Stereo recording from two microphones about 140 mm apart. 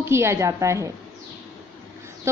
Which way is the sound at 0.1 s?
20° right (ahead or behind).